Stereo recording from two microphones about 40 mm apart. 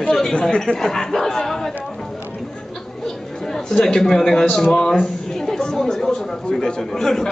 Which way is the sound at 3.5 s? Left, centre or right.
Centre.